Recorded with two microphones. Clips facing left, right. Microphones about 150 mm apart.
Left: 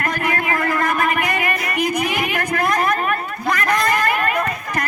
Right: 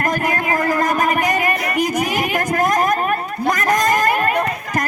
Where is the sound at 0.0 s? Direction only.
40° right (ahead or behind).